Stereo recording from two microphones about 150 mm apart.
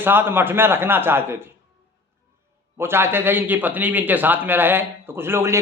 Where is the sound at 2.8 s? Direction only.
15° right (ahead or behind).